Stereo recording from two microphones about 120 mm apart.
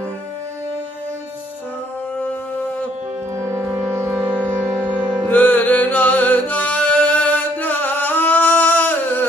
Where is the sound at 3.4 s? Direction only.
20° right (ahead or behind).